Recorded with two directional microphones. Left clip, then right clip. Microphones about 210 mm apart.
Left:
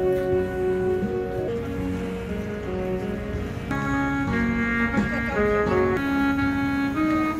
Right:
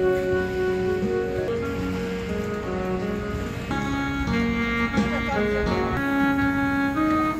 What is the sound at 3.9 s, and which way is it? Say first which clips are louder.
Music: left 3 dB; 55° right (ahead or behind).